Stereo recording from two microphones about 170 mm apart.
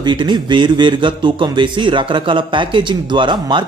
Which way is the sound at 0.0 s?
25° right (ahead or behind).